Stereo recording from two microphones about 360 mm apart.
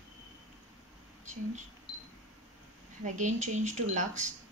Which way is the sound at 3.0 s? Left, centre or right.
Centre.